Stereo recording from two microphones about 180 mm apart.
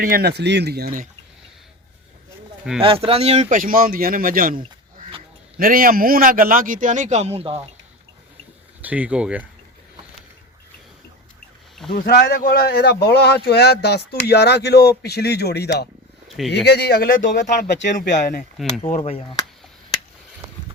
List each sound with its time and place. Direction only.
0.0 s speech: 55° right (ahead or behind)
2.8 s a man's voice: 30° right (ahead or behind)
8.8 s speech: 10° right (ahead or behind)
11.9 s speech: 55° left (ahead or behind); by 19.5 s 30° left (ahead or behind)